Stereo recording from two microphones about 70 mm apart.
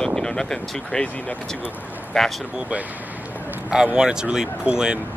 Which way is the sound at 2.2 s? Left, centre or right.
Centre.